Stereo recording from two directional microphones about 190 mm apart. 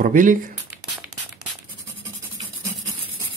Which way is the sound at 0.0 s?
45° right (ahead or behind).